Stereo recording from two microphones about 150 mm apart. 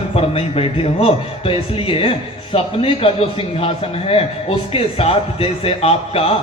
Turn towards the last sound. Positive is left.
turn(degrees=40)  # may be behind; listen again after turning